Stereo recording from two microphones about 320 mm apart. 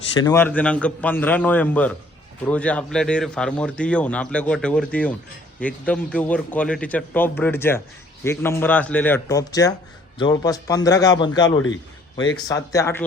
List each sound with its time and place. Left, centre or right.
0.2 s a man's voice: centre
11.5 s a man's voice: left
12.5 s speech: centre